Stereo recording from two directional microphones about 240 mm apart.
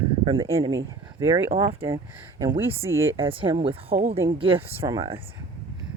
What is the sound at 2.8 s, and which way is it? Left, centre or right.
Speech, centre.